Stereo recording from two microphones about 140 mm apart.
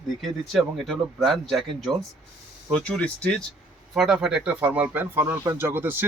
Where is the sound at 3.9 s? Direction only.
5° right (ahead or behind).